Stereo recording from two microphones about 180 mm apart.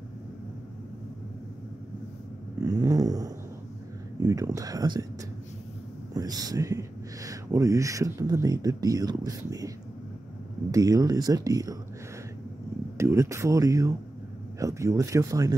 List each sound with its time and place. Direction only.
2.6 s a sound: 20° right (ahead or behind)
4.2 s speech: 20° right (ahead or behind)
6.1 s speech: 20° right (ahead or behind)
10.7 s speech: 20° right (ahead or behind)
12.9 s speech: 15° right (ahead or behind)